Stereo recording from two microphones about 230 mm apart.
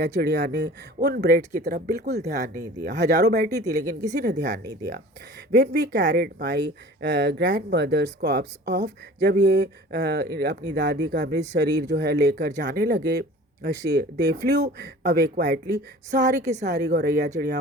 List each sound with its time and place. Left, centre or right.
0.0 s speech: right
1.4 s speech: right
3.2 s speech: right
4.6 s speech: centre
5.5 s speech: right
16.8 s speech: right